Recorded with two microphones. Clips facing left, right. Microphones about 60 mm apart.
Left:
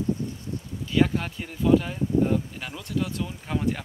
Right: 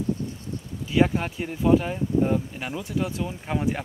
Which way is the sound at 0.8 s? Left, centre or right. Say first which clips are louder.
Right 1 dB; centre.